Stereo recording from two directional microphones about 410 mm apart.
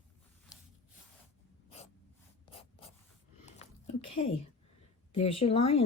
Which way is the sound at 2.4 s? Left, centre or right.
Centre.